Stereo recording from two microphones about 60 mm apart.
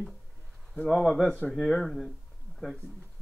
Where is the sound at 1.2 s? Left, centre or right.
Left.